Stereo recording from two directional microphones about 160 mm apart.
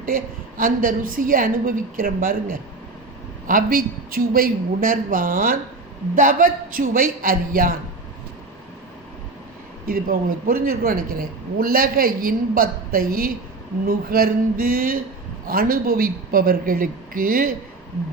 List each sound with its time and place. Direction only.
0.0 s speech: 60° right (ahead or behind)
9.8 s speech: 65° right (ahead or behind)